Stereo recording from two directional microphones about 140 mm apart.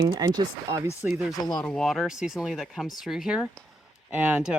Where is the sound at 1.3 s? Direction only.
30° left (ahead or behind).